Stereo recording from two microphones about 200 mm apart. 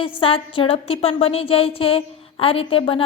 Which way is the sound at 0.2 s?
25° left (ahead or behind).